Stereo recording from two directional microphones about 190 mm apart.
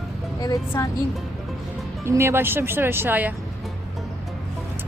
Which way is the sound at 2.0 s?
15° right (ahead or behind).